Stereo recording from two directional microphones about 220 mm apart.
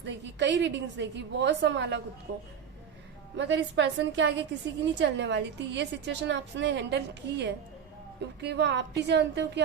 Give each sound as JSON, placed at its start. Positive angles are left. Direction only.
{"t": 0.0, "sound": "a woman's voice", "side_deg": -55}
{"t": 3.3, "sound": "a woman's voice", "side_deg": -55}